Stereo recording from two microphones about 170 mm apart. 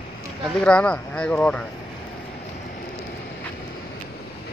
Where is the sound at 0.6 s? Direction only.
5° left (ahead or behind).